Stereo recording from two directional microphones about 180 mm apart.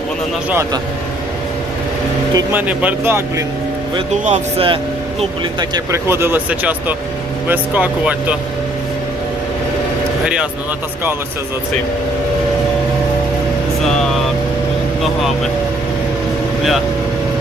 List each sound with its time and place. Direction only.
2.3 s speech: 10° right (ahead or behind)
4.1 s speech: 35° right (ahead or behind)
5.5 s speech: 20° right (ahead or behind)
13.8 s vehicle: centre (ahead or behind)